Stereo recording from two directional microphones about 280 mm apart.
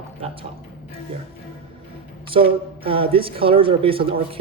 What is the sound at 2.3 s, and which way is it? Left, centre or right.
Speech, centre.